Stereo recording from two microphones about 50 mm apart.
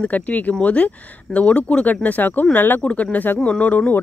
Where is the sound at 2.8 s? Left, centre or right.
Left.